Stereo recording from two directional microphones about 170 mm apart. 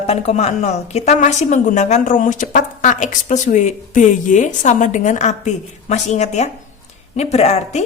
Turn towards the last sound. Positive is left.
turn(degrees=40)  # may be behind; listen again after turning